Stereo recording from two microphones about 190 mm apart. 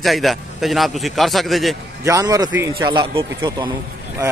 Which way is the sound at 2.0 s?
15° right (ahead or behind).